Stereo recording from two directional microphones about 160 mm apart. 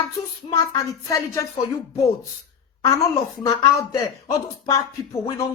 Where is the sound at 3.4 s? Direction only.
20° left (ahead or behind).